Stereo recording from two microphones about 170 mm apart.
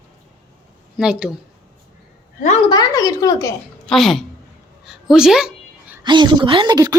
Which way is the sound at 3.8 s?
Centre (ahead or behind).